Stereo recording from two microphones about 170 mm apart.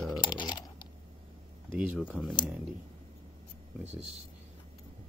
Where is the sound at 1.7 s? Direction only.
5° right (ahead or behind).